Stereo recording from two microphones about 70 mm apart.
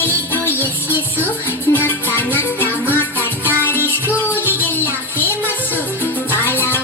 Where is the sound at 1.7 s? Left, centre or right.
Left.